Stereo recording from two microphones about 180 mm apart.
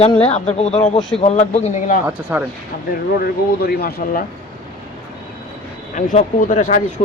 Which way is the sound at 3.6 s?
60° left (ahead or behind).